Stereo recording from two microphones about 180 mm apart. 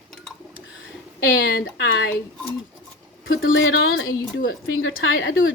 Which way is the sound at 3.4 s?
90° left.